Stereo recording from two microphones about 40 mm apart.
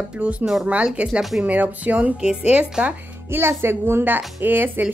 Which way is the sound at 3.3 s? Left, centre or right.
Right.